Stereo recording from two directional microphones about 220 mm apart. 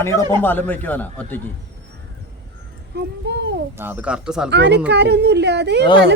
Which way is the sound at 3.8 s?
10° right (ahead or behind).